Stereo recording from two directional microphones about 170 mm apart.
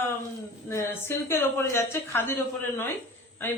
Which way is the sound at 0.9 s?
15° left (ahead or behind).